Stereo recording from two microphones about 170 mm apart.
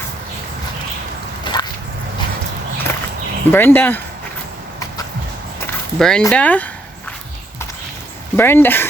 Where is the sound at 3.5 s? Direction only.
10° left (ahead or behind).